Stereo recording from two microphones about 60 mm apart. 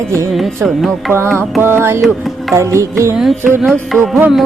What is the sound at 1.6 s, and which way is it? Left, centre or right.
Music, right.